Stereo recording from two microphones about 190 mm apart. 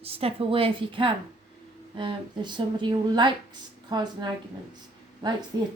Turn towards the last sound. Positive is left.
turn(degrees=-20)  # may be behind; listen again after turning